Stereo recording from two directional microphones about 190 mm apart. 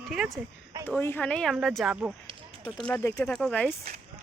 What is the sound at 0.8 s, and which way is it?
Speech, 10° left (ahead or behind).